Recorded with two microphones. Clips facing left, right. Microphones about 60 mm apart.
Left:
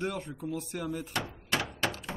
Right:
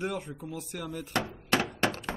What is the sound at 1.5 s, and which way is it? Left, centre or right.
Thunk, right.